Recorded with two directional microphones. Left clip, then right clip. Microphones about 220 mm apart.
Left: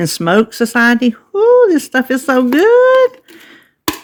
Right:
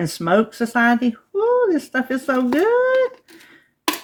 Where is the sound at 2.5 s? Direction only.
50° left (ahead or behind).